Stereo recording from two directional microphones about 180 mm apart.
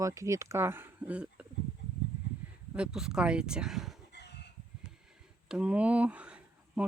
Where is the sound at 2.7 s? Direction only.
5° right (ahead or behind).